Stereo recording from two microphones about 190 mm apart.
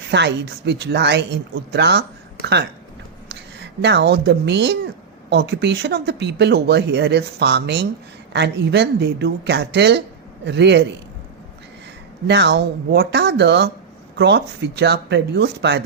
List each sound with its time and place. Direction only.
0.1 s speech: 65° right (ahead or behind)
12.3 s speech: 65° right (ahead or behind)